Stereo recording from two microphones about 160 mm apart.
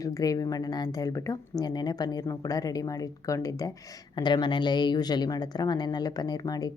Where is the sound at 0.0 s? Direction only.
20° left (ahead or behind).